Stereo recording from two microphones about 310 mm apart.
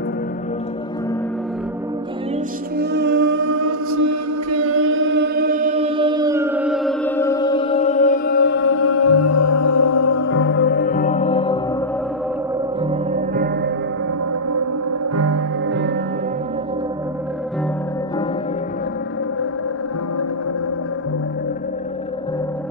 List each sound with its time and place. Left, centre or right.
2.8 s music: right
3.3 s chant: right; by 10.3 s left
10.3 s music: left; by 11.6 s centre
13.1 s music: right
14.5 s music: right